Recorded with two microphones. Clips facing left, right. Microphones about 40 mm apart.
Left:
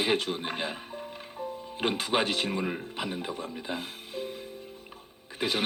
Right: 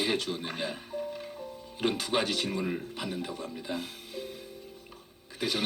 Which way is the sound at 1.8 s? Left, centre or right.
Left.